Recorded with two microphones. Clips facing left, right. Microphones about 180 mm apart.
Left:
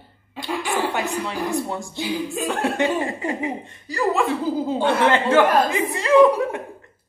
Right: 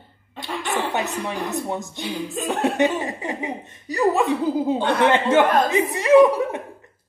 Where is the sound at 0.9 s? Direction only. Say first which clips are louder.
Even; 20° right (ahead or behind).